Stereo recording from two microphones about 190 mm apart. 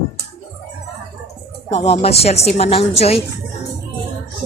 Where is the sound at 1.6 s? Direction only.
35° left (ahead or behind).